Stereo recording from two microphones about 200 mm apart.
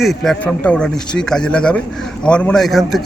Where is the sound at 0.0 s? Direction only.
Centre (ahead or behind).